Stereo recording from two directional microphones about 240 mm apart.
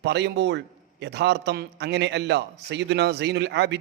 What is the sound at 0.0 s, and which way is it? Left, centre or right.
A man's voice, right.